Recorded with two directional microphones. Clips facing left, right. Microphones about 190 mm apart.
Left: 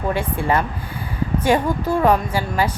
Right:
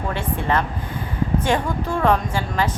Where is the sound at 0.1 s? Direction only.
10° left (ahead or behind).